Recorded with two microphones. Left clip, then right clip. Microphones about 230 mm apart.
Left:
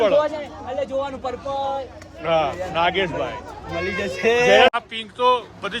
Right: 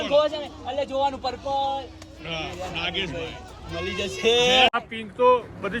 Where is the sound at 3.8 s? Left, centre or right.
Left.